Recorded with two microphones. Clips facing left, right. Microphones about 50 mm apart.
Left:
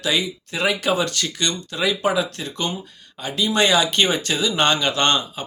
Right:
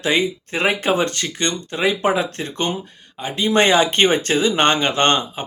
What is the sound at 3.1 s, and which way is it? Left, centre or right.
Speech, right.